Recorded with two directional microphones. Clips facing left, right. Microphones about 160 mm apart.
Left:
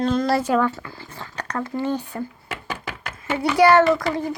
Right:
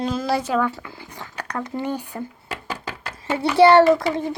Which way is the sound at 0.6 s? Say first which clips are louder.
Left 1 dB; 15° right (ahead or behind).